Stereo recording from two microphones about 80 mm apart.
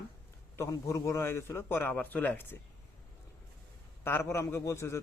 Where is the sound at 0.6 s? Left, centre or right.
Left.